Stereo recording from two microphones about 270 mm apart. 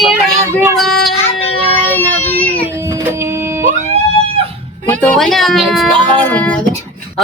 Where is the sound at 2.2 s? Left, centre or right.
Centre.